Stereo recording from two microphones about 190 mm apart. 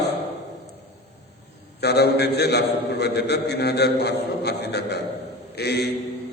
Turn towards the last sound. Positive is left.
turn(degrees=60)  # may be behind; listen again after turning